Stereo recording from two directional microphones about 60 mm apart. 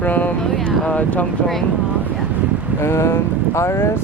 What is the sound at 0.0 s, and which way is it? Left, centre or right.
Vehicle, left.